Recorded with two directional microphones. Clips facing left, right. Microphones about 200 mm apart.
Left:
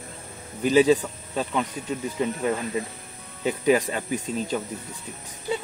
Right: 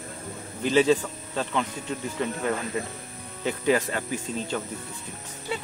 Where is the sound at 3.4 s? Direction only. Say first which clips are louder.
Left 3 dB; 15° left (ahead or behind).